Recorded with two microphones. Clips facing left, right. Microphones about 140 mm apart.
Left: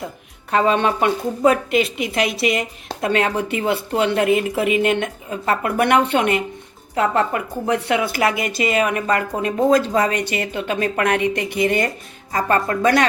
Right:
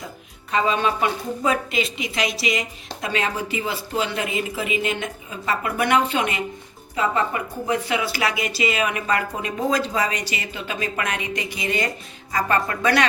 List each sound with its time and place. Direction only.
0.5 s a woman's voice: 65° left (ahead or behind)
12.3 s speech: 45° left (ahead or behind)